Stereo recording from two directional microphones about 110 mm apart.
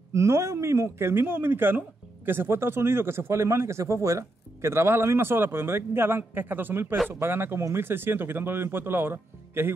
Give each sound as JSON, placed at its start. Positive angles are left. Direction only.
{"t": 0.1, "sound": "speech", "side_deg": -25}